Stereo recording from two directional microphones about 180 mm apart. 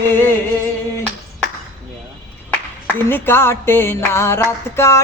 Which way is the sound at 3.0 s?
10° left (ahead or behind).